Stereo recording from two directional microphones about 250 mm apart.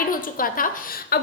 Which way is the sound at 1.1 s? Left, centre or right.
Left.